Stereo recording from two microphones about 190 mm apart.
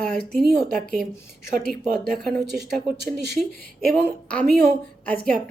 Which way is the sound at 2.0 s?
55° right (ahead or behind).